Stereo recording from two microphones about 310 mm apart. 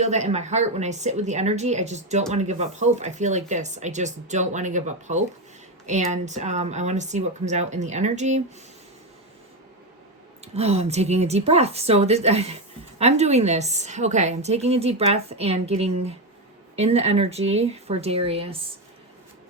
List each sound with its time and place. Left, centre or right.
0.0 s a woman's voice: right
10.4 s a woman's voice: centre